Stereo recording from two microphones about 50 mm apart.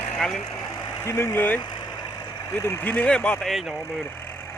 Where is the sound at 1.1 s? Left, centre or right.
Left.